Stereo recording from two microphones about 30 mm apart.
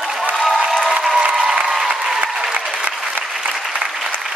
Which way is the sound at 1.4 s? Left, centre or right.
Right.